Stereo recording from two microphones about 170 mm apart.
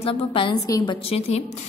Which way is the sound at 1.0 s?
35° left (ahead or behind).